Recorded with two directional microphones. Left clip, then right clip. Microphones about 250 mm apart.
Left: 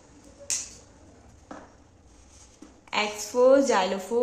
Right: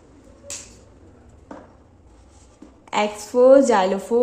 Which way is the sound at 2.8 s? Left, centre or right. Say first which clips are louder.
Right 5 dB; centre.